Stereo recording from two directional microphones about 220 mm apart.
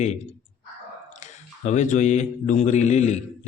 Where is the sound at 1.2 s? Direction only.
30° left (ahead or behind).